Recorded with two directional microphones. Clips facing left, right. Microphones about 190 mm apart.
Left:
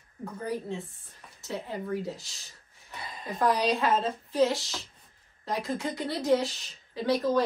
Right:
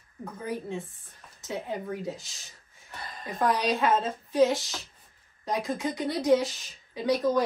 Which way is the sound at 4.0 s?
20° right (ahead or behind).